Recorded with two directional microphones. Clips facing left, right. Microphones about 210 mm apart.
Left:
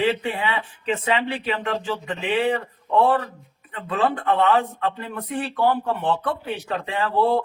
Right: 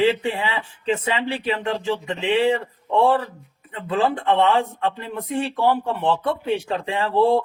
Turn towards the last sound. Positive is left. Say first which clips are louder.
# right 3 dB
turn(degrees=-30)  # may be behind; listen again after turning